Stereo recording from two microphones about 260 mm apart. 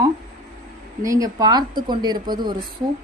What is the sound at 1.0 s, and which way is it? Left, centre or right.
Speech, centre.